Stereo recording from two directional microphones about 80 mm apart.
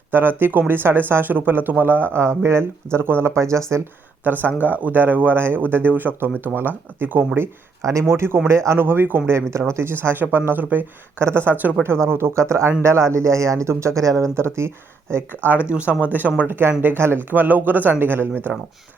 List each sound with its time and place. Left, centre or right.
0.1 s speech: right
4.2 s speech: right
7.8 s speech: right
15.7 s speech: centre
16.4 s speech: right